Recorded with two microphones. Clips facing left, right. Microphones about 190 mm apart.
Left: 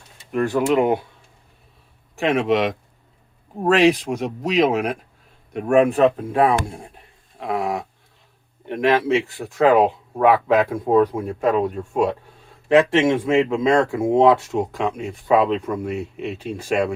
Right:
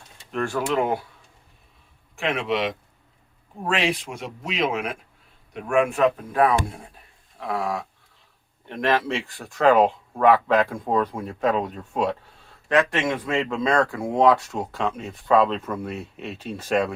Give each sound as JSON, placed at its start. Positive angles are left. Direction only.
{"t": 0.3, "sound": "speech", "side_deg": 15}
{"t": 2.1, "sound": "speech", "side_deg": 45}
{"t": 7.3, "sound": "dog", "side_deg": 20}
{"t": 8.6, "sound": "speech", "side_deg": 15}
{"t": 12.6, "sound": "speech", "side_deg": 25}